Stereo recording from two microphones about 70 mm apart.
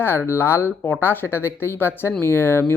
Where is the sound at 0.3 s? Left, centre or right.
Left.